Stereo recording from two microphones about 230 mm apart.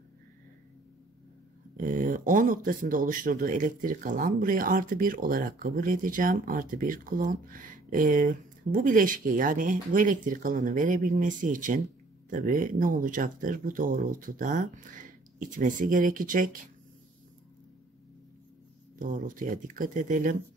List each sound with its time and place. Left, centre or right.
1.8 s speech: right
18.9 s speech: right